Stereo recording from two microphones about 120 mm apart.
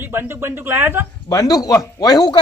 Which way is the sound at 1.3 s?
30° left (ahead or behind).